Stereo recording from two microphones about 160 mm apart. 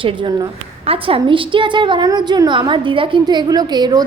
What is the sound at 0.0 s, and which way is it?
A woman's voice, 30° right (ahead or behind).